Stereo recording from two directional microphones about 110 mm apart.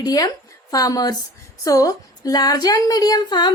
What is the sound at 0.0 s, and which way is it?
A woman's voice, 35° left (ahead or behind).